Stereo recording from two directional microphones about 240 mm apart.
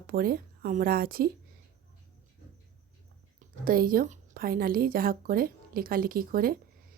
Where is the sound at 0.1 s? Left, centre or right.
Right.